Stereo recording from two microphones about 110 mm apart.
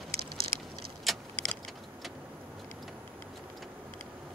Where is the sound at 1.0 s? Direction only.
Centre (ahead or behind).